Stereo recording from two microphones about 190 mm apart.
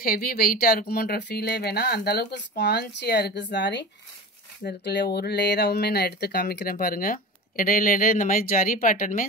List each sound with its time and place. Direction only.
0.0 s speech: 50° left (ahead or behind)